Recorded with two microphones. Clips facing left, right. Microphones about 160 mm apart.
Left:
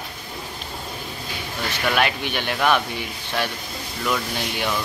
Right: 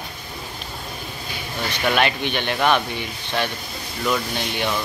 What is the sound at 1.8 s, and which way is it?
Speech, 5° left (ahead or behind).